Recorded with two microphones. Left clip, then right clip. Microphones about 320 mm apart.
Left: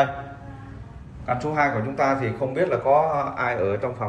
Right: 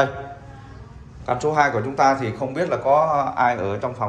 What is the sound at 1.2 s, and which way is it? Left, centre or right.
Speech, centre.